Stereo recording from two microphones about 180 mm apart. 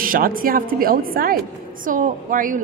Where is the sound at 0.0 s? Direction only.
50° right (ahead or behind).